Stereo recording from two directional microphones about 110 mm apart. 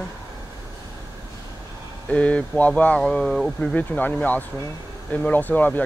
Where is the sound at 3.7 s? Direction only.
15° left (ahead or behind).